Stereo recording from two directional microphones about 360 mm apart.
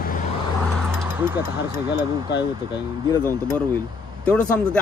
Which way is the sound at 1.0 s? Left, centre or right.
Centre.